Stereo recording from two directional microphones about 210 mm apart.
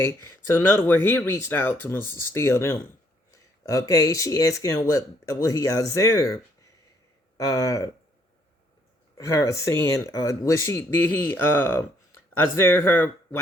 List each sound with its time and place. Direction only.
0.0 s speech: 10° left (ahead or behind)
9.1 s speech: 15° left (ahead or behind)